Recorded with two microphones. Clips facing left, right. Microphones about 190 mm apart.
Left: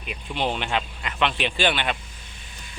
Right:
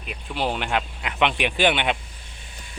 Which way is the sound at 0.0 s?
Centre (ahead or behind).